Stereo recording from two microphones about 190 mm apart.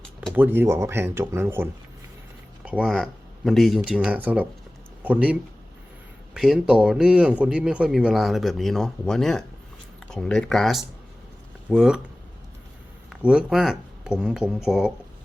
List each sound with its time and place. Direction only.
0.2 s speech: 10° right (ahead or behind)
13.1 s speech: 5° right (ahead or behind)